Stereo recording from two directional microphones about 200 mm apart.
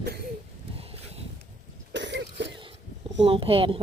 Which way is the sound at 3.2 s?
25° right (ahead or behind).